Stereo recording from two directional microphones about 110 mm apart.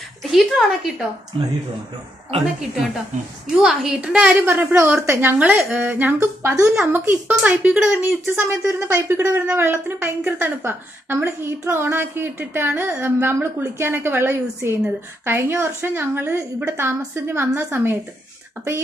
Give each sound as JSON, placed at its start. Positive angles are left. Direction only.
{"t": 0.2, "sound": "a woman's voice", "side_deg": 0}
{"t": 3.6, "sound": "speech", "side_deg": -5}
{"t": 4.5, "sound": "a woman's voice", "side_deg": -20}
{"t": 5.6, "sound": "speech", "side_deg": -10}
{"t": 6.1, "sound": "a woman's voice", "side_deg": -25}